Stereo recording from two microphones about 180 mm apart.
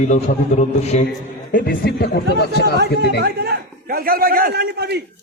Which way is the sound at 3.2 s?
60° right (ahead or behind).